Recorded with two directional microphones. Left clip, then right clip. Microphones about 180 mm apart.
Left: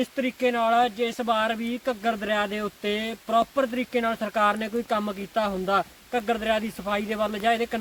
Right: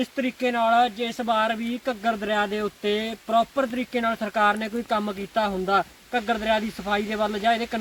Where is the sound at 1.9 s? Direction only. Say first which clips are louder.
Right 1 dB; 10° left (ahead or behind).